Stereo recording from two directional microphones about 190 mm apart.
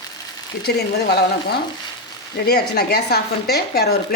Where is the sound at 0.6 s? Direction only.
60° left (ahead or behind).